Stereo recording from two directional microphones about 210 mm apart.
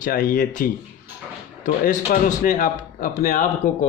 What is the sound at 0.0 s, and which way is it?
A man's voice, 40° left (ahead or behind).